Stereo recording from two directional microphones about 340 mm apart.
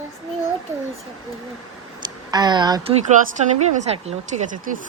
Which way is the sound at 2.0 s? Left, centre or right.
Centre.